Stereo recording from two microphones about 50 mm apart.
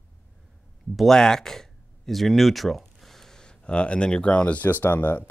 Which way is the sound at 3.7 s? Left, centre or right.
Left.